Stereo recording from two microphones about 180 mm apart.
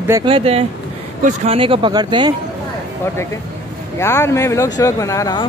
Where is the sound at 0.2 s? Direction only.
30° right (ahead or behind).